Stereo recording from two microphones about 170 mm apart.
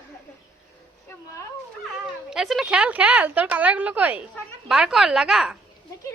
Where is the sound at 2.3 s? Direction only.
Centre (ahead or behind).